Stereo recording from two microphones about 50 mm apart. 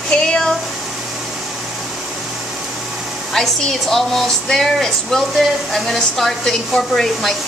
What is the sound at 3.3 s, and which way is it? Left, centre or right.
A woman's voice, centre.